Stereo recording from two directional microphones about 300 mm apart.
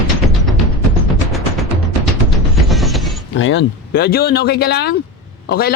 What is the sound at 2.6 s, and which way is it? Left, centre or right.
Music, centre.